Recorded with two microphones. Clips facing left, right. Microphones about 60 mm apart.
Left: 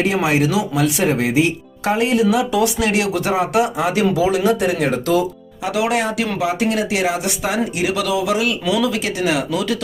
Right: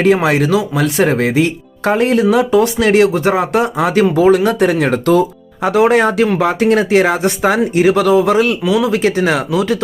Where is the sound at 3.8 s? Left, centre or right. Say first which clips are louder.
Right 5 dB; right.